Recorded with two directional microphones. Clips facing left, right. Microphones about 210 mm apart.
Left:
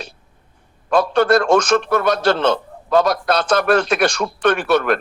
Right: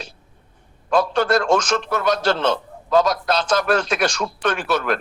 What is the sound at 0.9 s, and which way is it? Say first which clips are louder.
A man's voice: left 3 dB; 60° left (ahead or behind).